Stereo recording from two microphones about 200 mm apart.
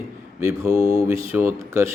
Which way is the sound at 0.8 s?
30° left (ahead or behind).